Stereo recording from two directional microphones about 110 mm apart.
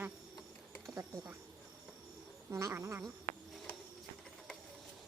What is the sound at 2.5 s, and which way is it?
Frog, 25° right (ahead or behind).